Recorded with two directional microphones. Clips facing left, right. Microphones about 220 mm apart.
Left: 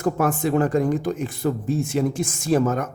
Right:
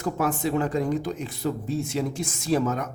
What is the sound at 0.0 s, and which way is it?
Speech, 50° left (ahead or behind).